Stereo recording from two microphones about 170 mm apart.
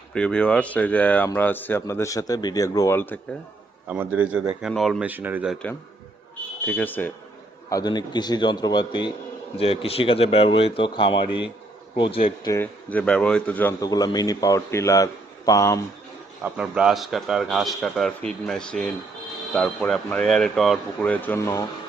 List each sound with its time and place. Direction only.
0.1 s speech: 5° left (ahead or behind)
3.8 s a man's voice: 10° right (ahead or behind)
6.7 s speech: 10° left (ahead or behind)
7.7 s speech: 25° left (ahead or behind)
12.5 s speech: 10° left (ahead or behind)
13.8 s speech: 20° left (ahead or behind)
16.4 s a man's voice: 5° right (ahead or behind); by 21.6 s 15° left (ahead or behind)